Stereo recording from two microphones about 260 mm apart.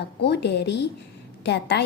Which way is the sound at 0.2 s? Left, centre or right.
Left.